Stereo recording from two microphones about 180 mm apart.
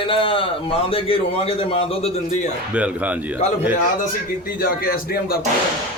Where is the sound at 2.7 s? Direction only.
10° right (ahead or behind).